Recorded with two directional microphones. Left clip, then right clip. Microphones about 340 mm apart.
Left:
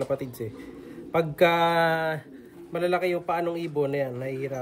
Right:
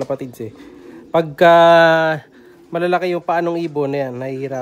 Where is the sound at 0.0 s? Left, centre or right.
Centre.